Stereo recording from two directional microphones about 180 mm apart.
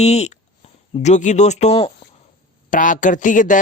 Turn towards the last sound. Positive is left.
turn(degrees=45)  # may be behind; listen again after turning